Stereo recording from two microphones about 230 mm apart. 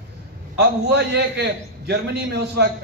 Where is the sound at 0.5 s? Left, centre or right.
Right.